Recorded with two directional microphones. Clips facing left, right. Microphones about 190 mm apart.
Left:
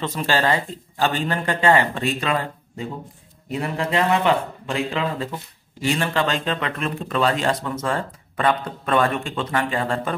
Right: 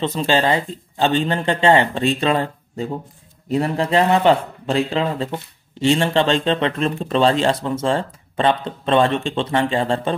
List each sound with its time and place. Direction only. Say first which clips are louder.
0.0 s speech: right 4 dB; 20° right (ahead or behind)